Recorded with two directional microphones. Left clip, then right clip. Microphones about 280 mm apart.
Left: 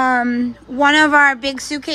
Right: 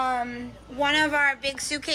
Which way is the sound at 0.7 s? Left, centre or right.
Left.